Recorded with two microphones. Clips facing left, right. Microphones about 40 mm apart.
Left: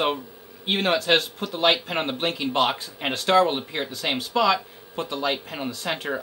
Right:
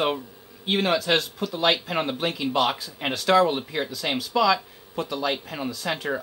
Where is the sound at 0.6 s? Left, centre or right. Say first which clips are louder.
Even; left.